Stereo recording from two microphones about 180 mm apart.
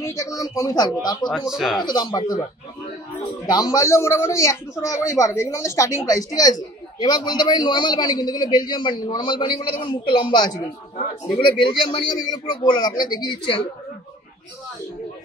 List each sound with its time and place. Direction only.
0.0 s a man's voice: 20° left (ahead or behind)
1.5 s speech: 5° right (ahead or behind)
1.8 s a man's voice: 25° left (ahead or behind)
3.4 s a man's voice: 20° left (ahead or behind)